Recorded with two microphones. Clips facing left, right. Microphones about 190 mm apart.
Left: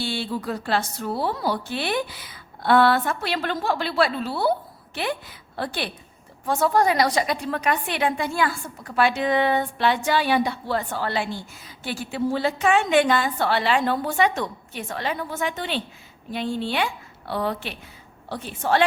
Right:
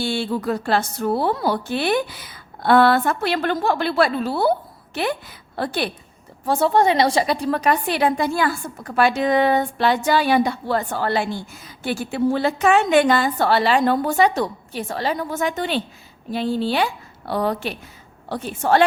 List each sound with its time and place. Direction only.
0.0 s a woman's voice: 45° right (ahead or behind)
5.5 s a woman's voice: 40° right (ahead or behind)
6.4 s a woman's voice: 30° right (ahead or behind)